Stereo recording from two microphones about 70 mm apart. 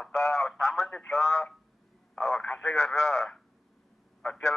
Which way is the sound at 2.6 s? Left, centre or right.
Left.